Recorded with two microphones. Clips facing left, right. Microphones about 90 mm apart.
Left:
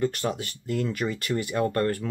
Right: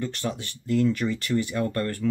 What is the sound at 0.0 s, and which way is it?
Speech, 10° left (ahead or behind).